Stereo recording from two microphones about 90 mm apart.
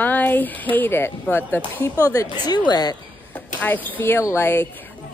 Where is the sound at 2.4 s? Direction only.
50° left (ahead or behind).